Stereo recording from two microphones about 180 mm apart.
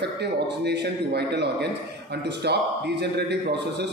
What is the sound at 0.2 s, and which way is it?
A man's voice, 70° right (ahead or behind).